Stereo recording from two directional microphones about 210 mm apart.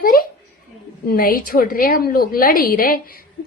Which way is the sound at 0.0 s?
45° left (ahead or behind).